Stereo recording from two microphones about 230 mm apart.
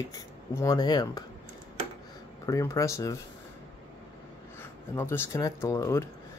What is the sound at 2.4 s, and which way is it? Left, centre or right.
Speech, centre.